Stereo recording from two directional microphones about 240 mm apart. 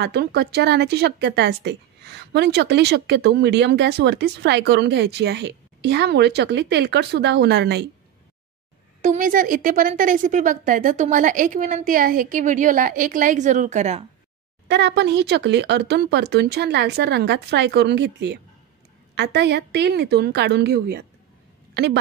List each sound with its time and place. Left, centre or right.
0.0 s speech: right
9.0 s a woman's voice: right
14.7 s speech: right